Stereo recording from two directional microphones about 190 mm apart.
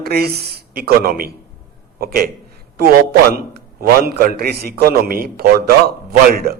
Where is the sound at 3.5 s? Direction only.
55° right (ahead or behind).